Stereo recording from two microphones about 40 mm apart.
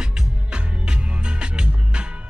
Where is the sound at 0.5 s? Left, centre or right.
Right.